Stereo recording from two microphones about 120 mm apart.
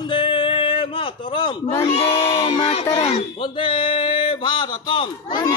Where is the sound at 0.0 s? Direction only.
40° left (ahead or behind).